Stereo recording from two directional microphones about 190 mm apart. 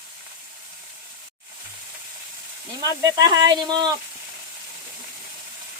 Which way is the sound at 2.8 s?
20° right (ahead or behind).